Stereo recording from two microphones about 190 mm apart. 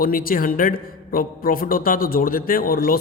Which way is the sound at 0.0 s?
50° left (ahead or behind).